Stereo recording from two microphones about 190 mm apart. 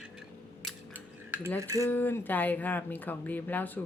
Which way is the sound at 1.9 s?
10° left (ahead or behind).